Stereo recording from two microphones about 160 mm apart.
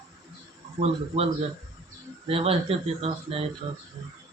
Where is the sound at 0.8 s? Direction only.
40° right (ahead or behind).